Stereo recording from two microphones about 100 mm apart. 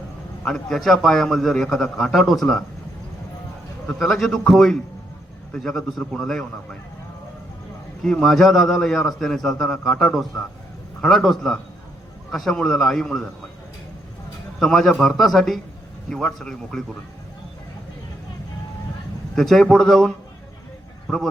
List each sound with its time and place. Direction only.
0.4 s a man's voice: 5° left (ahead or behind)
3.8 s a man's voice: 5° left (ahead or behind)
8.0 s a man's voice: 5° left (ahead or behind)
14.6 s a man's voice: 5° left (ahead or behind)
19.4 s a man's voice: centre (ahead or behind)